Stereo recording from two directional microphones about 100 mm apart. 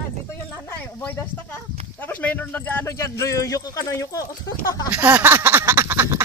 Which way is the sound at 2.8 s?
30° left (ahead or behind).